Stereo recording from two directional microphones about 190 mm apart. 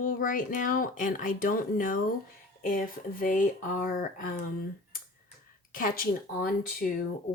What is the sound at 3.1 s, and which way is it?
Speech, 45° left (ahead or behind).